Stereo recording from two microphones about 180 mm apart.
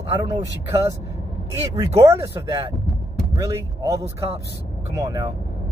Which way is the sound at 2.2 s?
25° right (ahead or behind).